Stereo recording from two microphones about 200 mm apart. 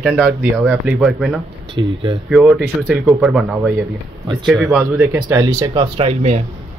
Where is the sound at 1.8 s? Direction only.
20° right (ahead or behind).